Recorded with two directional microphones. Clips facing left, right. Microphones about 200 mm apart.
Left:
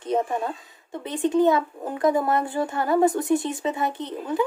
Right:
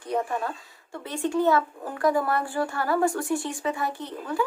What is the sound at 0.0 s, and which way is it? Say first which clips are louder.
Speech: left 3 dB; 20° left (ahead or behind).